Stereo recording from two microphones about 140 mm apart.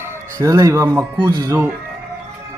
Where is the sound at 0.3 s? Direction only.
25° right (ahead or behind).